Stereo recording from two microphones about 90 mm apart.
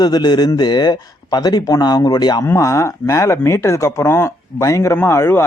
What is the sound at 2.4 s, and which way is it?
Speech, 30° left (ahead or behind).